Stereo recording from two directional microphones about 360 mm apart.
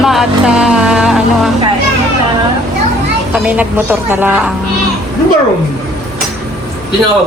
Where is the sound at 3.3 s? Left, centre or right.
Centre.